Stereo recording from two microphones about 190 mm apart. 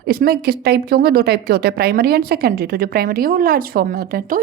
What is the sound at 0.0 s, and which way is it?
A woman's voice, 55° right (ahead or behind).